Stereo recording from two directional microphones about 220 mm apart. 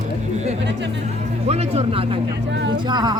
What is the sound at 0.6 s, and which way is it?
Music, 55° right (ahead or behind).